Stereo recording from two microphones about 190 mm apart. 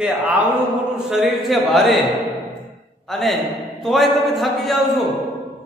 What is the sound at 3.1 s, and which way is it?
A man's voice, centre (ahead or behind).